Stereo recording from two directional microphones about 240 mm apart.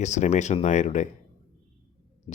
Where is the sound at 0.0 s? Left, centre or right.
Left.